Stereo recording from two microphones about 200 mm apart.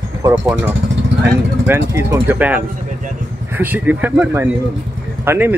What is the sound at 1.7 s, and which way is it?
Speech, 10° right (ahead or behind).